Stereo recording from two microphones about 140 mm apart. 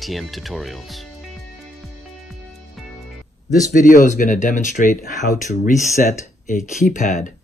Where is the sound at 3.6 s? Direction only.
65° left (ahead or behind).